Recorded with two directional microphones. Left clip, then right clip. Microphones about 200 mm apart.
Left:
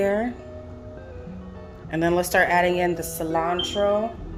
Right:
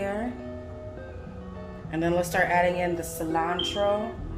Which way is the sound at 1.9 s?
50° left (ahead or behind).